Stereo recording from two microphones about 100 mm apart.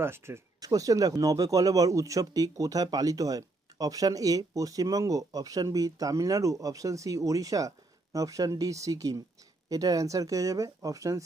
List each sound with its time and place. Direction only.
0.0 s speech: 25° right (ahead or behind)
0.6 s speech: 35° right (ahead or behind)